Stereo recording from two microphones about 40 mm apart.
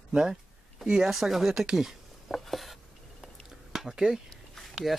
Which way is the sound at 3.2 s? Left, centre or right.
Centre.